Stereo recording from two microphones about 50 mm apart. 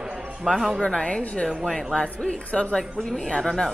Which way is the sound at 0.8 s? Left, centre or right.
Centre.